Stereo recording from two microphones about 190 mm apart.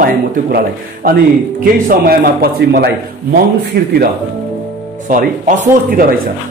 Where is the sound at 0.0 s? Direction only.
50° right (ahead or behind).